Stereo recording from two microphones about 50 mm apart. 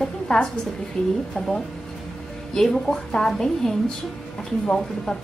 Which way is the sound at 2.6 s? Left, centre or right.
Centre.